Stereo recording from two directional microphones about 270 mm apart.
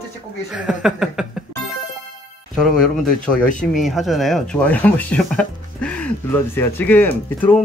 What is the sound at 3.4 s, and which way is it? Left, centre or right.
Speech, left.